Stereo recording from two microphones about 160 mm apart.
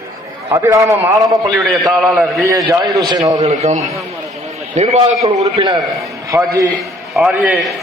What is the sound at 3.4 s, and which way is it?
Speech, 40° right (ahead or behind).